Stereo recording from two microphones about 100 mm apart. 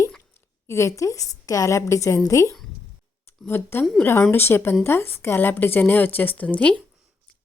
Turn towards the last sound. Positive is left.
turn(degrees=10)  # may be behind; listen again after turning